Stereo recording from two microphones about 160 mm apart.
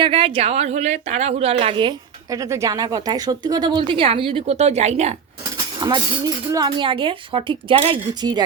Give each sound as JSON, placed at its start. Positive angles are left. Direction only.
{"t": 0.0, "sound": "a woman's voice", "side_deg": -35}
{"t": 5.8, "sound": "a woman's voice", "side_deg": -30}